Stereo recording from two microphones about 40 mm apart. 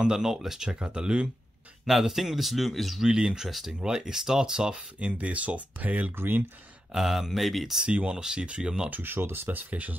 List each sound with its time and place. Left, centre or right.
0.0 s speech: centre
0.7 s speech: right
1.9 s a man's voice: centre
3.0 s speech: centre
3.4 s a man's voice: centre
3.8 s speech: centre
5.2 s speech: right
6.1 s speech: right
6.9 s speech: centre
7.9 s speech: right
8.2 s speech: centre
9.0 s speech: right
9.7 s speech: right